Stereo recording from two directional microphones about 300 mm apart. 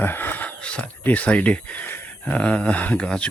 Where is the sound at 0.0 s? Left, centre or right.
Centre.